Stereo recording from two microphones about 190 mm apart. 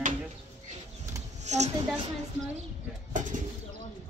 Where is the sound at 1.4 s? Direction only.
35° right (ahead or behind).